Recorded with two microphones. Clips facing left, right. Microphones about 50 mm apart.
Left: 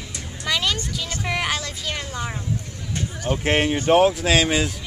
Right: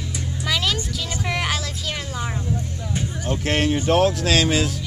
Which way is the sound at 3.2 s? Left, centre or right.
Centre.